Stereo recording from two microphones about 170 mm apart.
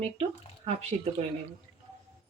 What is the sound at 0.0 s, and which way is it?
Speech, 35° right (ahead or behind).